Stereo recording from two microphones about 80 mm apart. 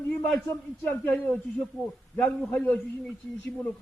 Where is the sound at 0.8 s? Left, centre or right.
Left.